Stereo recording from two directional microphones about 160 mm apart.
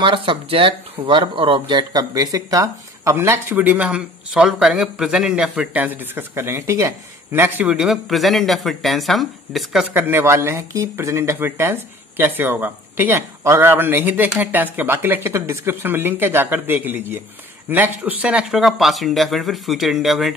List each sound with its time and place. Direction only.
0.0 s speech: 30° right (ahead or behind); by 20.3 s centre (ahead or behind)